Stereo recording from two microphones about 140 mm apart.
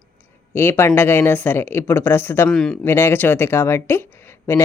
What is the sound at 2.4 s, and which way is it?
Speech, 5° left (ahead or behind).